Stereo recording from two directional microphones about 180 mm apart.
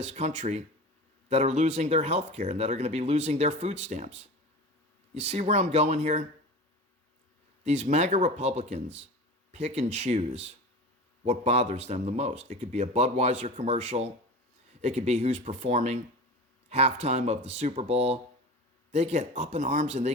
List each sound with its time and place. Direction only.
0.0 s speech: 40° right (ahead or behind)
7.6 s speech: 40° right (ahead or behind)